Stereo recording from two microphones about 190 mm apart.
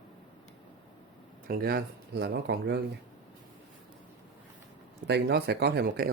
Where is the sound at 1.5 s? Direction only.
50° right (ahead or behind).